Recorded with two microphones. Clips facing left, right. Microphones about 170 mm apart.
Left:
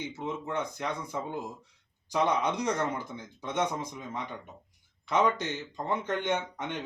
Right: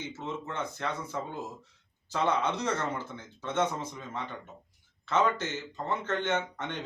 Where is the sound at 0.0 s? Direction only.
15° left (ahead or behind).